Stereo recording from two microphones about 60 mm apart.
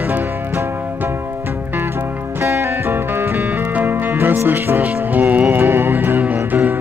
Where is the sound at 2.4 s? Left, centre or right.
Right.